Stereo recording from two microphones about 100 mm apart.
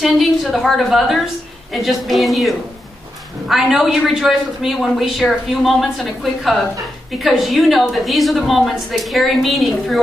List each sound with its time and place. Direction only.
0.0 s a woman's voice: centre (ahead or behind)
7.2 s a woman's voice: centre (ahead or behind)